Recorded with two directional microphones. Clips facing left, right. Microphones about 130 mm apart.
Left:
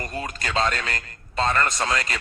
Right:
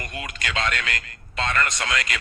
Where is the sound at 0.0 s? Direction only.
35° left (ahead or behind).